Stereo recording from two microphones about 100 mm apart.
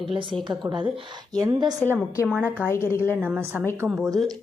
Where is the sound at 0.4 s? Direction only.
50° right (ahead or behind).